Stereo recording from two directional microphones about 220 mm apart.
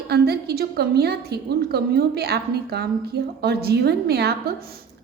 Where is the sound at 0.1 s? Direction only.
45° right (ahead or behind).